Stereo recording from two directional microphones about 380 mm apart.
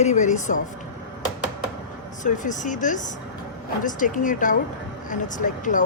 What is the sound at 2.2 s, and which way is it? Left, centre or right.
Speech, centre.